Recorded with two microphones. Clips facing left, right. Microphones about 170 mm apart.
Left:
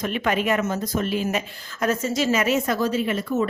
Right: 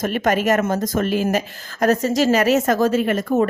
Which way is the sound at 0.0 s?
45° right (ahead or behind).